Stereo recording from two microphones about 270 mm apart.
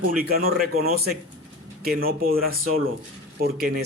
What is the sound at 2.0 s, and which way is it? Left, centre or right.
Speech, right.